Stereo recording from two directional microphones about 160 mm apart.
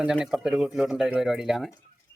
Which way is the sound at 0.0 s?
5° right (ahead or behind).